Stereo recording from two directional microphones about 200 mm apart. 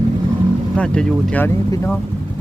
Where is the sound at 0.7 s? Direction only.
5° left (ahead or behind).